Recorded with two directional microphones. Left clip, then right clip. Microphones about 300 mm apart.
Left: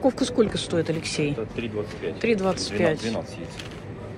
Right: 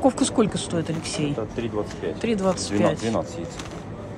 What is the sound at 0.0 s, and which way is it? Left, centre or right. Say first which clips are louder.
Speech: right 1 dB; centre.